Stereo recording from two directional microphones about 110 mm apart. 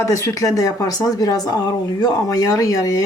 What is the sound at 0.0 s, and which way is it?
Speech, 30° left (ahead or behind).